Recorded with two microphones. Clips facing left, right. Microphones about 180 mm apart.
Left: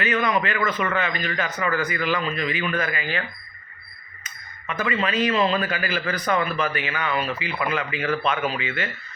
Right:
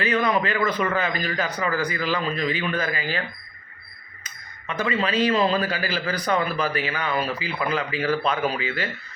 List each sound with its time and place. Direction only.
0.0 s a man's voice: 35° right (ahead or behind)
4.7 s a man's voice: 35° right (ahead or behind)